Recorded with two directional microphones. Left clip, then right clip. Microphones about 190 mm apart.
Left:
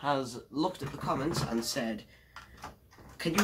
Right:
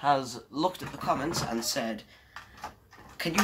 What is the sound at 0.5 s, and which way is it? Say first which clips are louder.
Speech: right 3 dB; 5° right (ahead or behind).